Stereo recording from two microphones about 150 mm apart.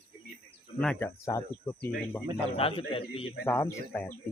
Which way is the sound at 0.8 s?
5° left (ahead or behind).